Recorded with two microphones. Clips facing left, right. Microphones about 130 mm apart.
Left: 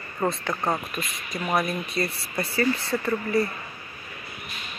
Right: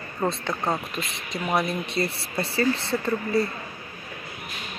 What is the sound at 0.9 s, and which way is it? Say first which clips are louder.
Speech: right 1 dB; 25° right (ahead or behind).